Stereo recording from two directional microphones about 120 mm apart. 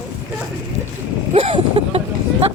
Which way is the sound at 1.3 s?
55° right (ahead or behind).